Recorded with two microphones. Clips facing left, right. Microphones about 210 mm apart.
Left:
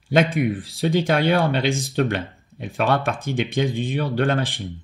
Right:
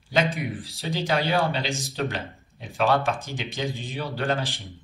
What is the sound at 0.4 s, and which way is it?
A man's voice, 55° left (ahead or behind).